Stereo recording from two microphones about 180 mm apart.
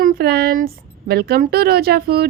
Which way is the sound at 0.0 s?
55° right (ahead or behind).